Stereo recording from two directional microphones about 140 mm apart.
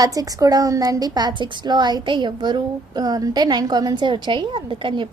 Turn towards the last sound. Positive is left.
turn(degrees=-35)  # may be behind; listen again after turning